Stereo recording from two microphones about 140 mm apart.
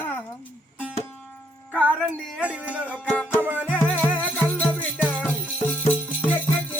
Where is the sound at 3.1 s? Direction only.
10° left (ahead or behind).